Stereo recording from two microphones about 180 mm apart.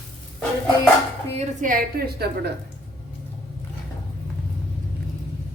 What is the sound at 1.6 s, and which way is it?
Speech, 55° right (ahead or behind).